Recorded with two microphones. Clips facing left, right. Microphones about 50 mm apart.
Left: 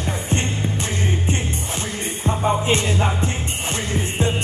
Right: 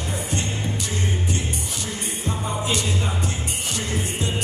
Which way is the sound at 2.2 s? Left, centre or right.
Left.